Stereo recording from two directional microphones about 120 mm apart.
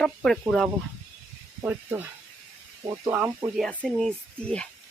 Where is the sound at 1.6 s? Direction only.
15° right (ahead or behind).